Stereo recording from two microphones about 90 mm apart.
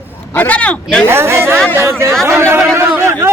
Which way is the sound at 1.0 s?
25° right (ahead or behind).